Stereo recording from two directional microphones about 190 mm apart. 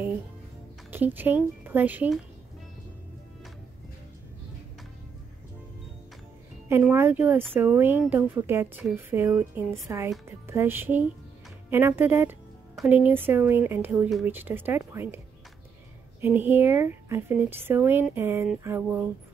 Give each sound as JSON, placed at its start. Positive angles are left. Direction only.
{"t": 0.9, "sound": "speech", "side_deg": -10}
{"t": 6.7, "sound": "speech", "side_deg": -10}
{"t": 16.2, "sound": "speech", "side_deg": -10}